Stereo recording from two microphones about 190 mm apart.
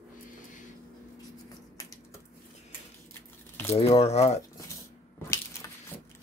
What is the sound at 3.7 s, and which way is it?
Speech, 30° left (ahead or behind).